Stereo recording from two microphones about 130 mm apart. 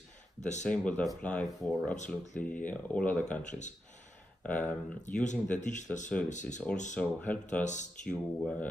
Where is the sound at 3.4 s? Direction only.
65° left (ahead or behind).